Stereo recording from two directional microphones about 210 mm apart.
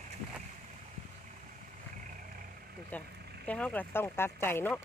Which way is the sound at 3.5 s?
5° left (ahead or behind).